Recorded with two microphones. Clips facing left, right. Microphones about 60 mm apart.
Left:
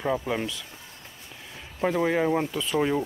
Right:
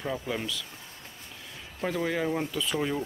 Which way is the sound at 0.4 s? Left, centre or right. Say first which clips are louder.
Left 3 dB; left.